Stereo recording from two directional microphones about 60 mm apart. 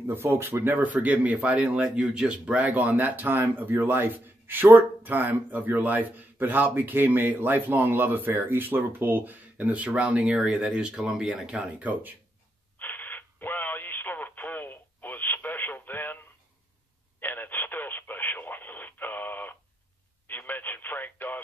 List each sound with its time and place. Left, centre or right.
0.0 s speech: right; by 11.5 s centre
11.5 s speech: right
12.7 s radio: left
17.2 s radio: left
20.2 s a sound: left